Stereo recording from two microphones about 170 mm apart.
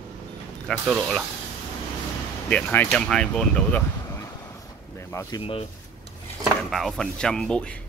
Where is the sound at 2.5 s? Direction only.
10° left (ahead or behind).